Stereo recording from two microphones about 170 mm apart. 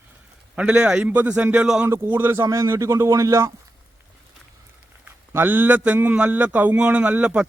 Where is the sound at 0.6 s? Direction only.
5° right (ahead or behind).